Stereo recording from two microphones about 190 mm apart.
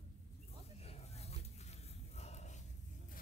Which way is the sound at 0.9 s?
35° left (ahead or behind).